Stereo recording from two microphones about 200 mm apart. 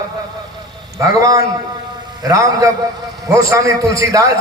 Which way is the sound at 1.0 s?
15° right (ahead or behind).